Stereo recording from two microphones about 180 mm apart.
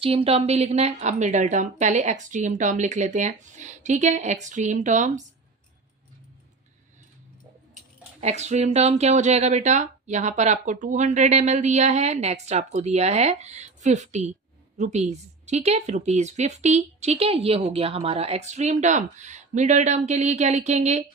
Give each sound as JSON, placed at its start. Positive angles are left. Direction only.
{"t": 0.0, "sound": "speech", "side_deg": -30}
{"t": 8.2, "sound": "speech", "side_deg": -40}